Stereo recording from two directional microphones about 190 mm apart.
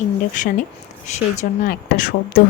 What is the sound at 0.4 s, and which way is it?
A woman's voice, 40° left (ahead or behind).